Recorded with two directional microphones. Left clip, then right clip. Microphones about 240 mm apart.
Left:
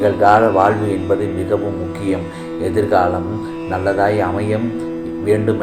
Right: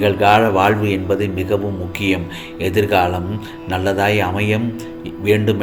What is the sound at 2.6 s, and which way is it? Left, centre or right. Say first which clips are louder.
Speech: left 1 dB; right.